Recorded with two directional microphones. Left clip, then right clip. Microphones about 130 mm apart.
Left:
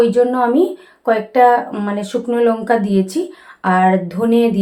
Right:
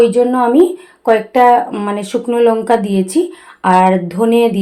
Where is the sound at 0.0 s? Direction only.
15° right (ahead or behind).